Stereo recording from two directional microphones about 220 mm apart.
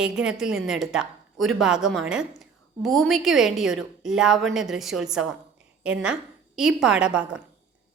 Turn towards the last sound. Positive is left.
turn(degrees=-5)  # may be behind; listen again after turning